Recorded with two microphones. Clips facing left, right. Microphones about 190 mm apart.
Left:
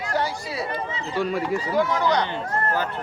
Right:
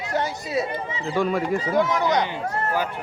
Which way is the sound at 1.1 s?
50° right (ahead or behind).